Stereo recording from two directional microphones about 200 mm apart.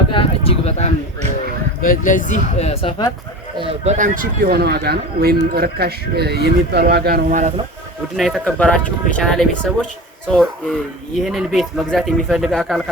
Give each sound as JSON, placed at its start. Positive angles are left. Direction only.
{"t": 0.1, "sound": "a sound", "side_deg": 25}
{"t": 1.8, "sound": "speech", "side_deg": 40}
{"t": 3.6, "sound": "a man's voice", "side_deg": -30}
{"t": 7.3, "sound": "speech", "side_deg": -35}
{"t": 8.1, "sound": "speech", "side_deg": 0}